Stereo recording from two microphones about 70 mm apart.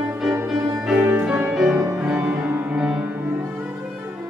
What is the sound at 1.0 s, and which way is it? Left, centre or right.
Music, right.